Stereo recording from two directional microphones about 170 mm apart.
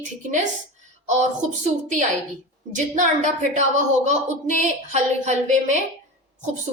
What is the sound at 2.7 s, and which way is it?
A woman's voice, 45° right (ahead or behind).